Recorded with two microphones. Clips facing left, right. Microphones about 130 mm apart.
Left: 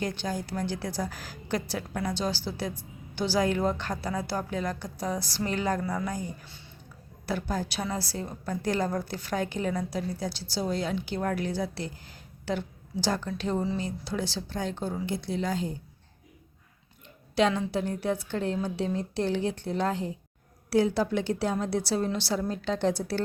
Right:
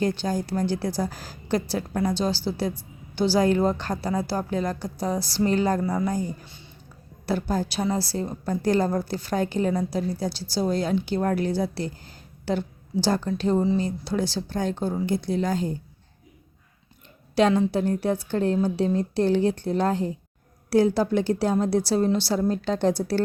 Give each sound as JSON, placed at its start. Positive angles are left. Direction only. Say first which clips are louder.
{"t": 0.0, "sound": "a woman's voice", "louder": "right 6 dB", "side_deg": -35}
{"t": 6.4, "sound": "speech", "louder": "right 3 dB", "side_deg": -15}
{"t": 7.3, "sound": "a woman's voice", "louder": "right 5 dB", "side_deg": -35}
{"t": 17.3, "sound": "a woman's voice", "louder": "right 5 dB", "side_deg": -40}